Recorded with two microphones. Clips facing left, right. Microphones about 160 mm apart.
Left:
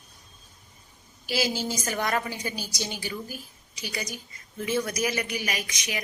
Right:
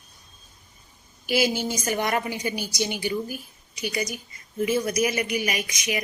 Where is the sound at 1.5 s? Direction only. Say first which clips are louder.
Right 3 dB; 15° right (ahead or behind).